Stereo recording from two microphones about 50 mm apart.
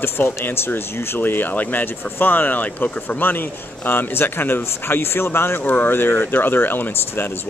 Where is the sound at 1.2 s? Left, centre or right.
Left.